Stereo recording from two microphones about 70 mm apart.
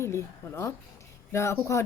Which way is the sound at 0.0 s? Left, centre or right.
Left.